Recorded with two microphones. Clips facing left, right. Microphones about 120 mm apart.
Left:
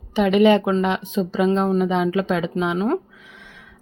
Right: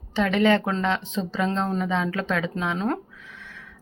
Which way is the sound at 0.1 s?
15° left (ahead or behind).